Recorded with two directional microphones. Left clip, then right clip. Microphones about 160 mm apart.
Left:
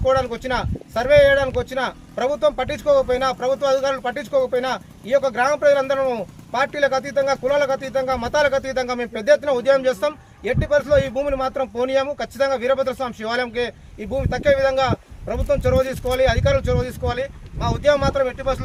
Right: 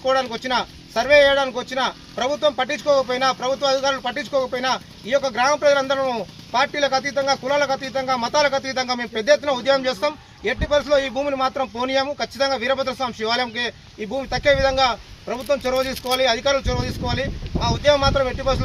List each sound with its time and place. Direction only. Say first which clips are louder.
0.1 s speech: even; 30° left (ahead or behind)